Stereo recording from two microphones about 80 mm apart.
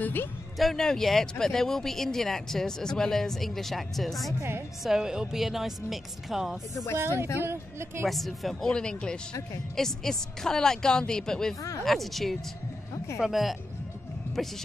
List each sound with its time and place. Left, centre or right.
0.0 s speech: left
0.6 s speech: centre
4.4 s speech: right
4.8 s speech: centre
7.0 s speech: right
8.1 s a woman's voice: centre